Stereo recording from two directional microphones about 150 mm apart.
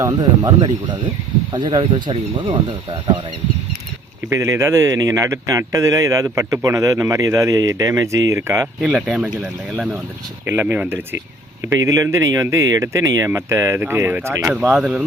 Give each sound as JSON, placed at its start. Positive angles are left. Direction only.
{"t": 0.0, "sound": "speech", "side_deg": -25}
{"t": 4.3, "sound": "speech", "side_deg": -20}
{"t": 8.8, "sound": "speech", "side_deg": -5}